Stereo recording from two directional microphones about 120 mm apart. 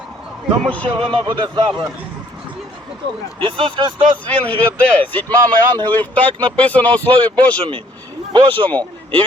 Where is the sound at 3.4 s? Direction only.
45° right (ahead or behind).